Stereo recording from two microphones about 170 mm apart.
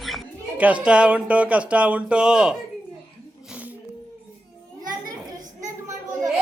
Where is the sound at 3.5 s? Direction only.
10° right (ahead or behind).